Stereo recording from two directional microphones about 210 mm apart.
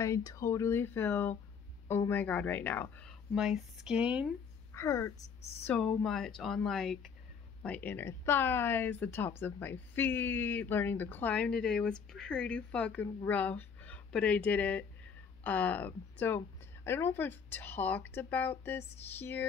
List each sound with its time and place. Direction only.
0.0 s speech: 15° left (ahead or behind); by 4.3 s 5° right (ahead or behind)
4.7 s speech: 15° left (ahead or behind)